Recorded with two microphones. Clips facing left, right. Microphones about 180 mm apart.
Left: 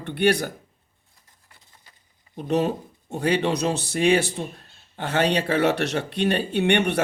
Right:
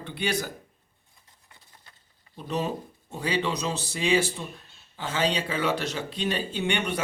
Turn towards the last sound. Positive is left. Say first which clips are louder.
# left 7 dB
turn(degrees=65)  # may be behind; listen again after turning